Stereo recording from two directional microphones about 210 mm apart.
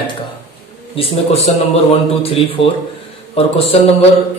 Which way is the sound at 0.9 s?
30° left (ahead or behind).